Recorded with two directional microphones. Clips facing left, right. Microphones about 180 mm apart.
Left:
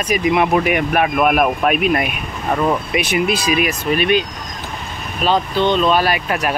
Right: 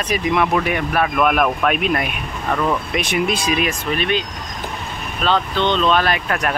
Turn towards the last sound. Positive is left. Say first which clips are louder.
# left 2 dB
turn(degrees=10)  # may be behind; listen again after turning